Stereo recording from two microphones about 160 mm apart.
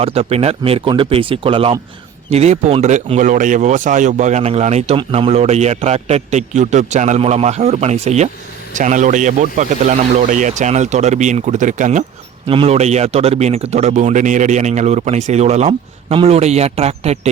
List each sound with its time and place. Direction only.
0.0 s speech: 40° right (ahead or behind)
12.5 s speech: 35° right (ahead or behind)